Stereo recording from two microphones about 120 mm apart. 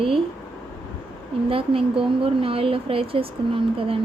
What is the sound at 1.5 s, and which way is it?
Speech, 50° right (ahead or behind).